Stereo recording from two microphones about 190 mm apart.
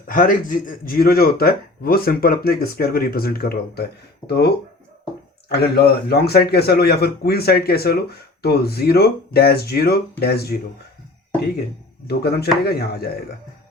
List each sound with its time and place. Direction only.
0.1 s speech: 45° left (ahead or behind)
5.5 s a man's voice: 60° left (ahead or behind)
12.0 s a man's voice: 55° left (ahead or behind)